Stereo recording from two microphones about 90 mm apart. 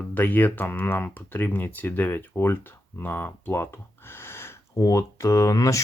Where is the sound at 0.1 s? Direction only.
20° left (ahead or behind).